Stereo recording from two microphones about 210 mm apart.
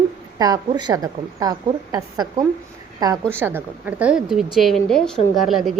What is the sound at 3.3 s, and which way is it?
A woman's voice, 10° right (ahead or behind).